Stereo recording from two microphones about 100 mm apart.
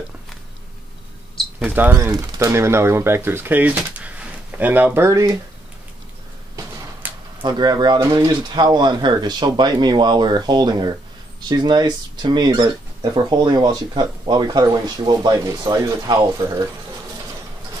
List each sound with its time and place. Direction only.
1.7 s speech: 15° right (ahead or behind)
2.3 s speech: 30° right (ahead or behind)
7.0 s a sound: 15° right (ahead or behind)
7.4 s speech: 45° right (ahead or behind)